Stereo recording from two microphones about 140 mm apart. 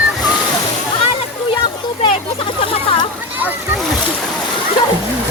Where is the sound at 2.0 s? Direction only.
40° left (ahead or behind).